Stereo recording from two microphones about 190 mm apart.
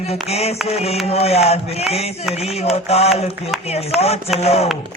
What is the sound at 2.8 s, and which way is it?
Music, 30° left (ahead or behind).